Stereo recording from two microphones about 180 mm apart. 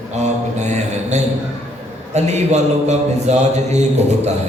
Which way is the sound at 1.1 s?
40° right (ahead or behind).